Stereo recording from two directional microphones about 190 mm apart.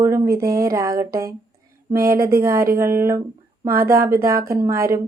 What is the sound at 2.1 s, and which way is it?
Speech, 15° right (ahead or behind).